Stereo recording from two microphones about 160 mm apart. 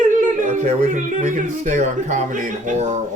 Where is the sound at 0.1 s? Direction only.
50° right (ahead or behind).